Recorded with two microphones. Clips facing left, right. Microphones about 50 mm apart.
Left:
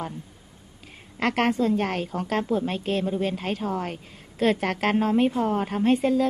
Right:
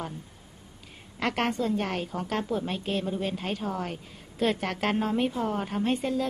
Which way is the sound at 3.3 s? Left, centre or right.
Left.